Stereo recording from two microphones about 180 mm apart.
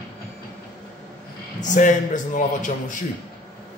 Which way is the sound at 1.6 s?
45° left (ahead or behind).